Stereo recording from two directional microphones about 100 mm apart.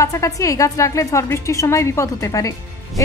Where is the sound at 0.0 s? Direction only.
30° left (ahead or behind).